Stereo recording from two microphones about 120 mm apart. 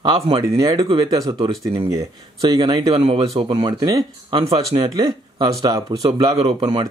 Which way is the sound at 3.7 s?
35° right (ahead or behind).